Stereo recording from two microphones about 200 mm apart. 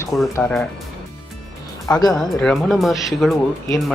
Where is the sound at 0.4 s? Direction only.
Centre (ahead or behind).